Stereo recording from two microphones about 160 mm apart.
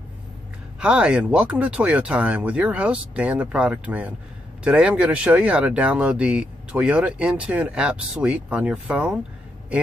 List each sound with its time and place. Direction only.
0.7 s speech: 5° right (ahead or behind)